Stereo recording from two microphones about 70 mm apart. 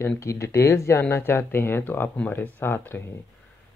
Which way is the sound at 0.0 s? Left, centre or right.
Left.